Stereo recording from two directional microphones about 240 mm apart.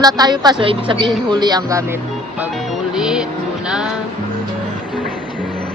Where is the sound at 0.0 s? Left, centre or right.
Centre.